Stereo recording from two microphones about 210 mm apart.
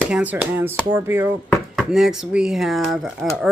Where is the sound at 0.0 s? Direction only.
10° right (ahead or behind).